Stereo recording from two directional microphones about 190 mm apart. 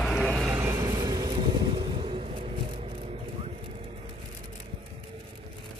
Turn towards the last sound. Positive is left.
turn(degrees=-30)  # may be behind; listen again after turning